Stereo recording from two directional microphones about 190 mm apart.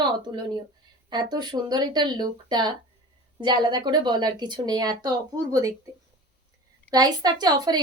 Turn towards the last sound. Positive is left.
turn(degrees=-20)  # may be behind; listen again after turning